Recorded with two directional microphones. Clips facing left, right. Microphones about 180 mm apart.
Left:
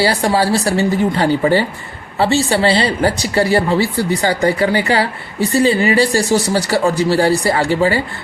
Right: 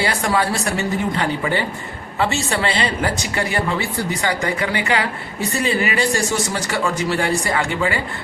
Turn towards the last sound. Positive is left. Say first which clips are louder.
# left 6 dB
turn(degrees=35)  # may be behind; listen again after turning